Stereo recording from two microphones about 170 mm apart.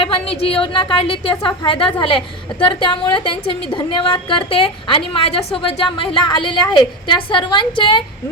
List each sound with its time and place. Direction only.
0.0 s a woman's voice: 35° left (ahead or behind)